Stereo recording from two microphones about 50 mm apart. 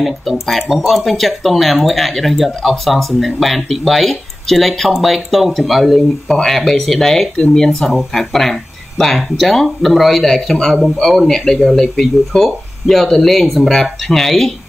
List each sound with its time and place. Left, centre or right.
0.0 s speech: centre